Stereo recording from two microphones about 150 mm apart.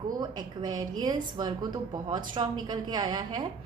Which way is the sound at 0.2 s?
30° right (ahead or behind).